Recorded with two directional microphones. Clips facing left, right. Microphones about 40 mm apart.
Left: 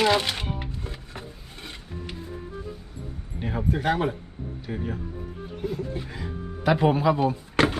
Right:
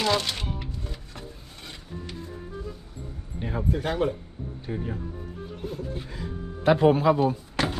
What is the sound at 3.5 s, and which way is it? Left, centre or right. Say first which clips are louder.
Speech: left 1 dB; left.